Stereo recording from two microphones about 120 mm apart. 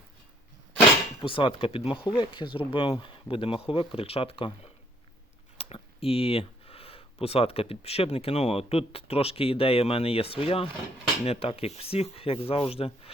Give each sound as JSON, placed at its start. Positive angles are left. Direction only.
{"t": 1.2, "sound": "speech", "side_deg": 45}